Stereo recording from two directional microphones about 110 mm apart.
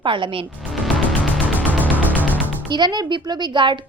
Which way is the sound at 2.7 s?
40° right (ahead or behind).